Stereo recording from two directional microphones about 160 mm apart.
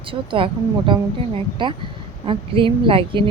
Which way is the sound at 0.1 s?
35° right (ahead or behind).